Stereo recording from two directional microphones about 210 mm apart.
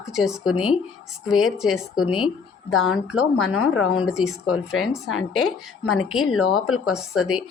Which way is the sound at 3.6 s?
85° left.